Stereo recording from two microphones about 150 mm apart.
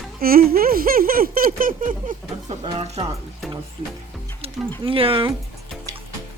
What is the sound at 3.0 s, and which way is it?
Speech, 35° right (ahead or behind).